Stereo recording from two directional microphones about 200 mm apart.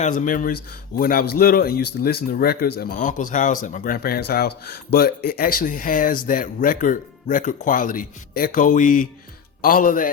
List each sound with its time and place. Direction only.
0.0 s speech: 40° left (ahead or behind)